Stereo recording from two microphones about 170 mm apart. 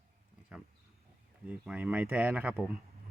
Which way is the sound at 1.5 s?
10° right (ahead or behind).